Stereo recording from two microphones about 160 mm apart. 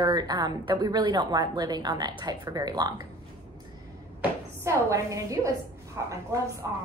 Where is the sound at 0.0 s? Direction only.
25° right (ahead or behind).